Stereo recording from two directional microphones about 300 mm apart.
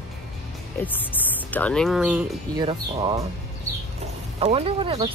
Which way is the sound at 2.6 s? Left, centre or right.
Centre.